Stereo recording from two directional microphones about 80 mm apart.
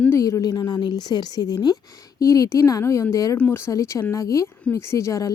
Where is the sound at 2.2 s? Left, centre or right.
Left.